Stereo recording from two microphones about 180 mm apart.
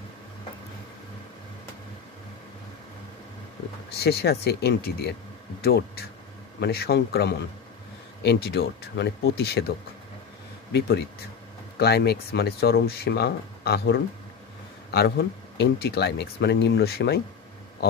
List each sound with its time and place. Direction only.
3.9 s speech: 65° left (ahead or behind)